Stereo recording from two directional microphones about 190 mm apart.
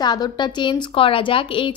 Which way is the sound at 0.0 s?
20° left (ahead or behind).